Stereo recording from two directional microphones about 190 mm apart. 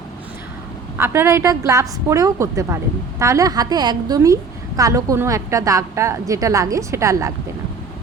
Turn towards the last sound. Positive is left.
turn(degrees=-15)  # may be behind; listen again after turning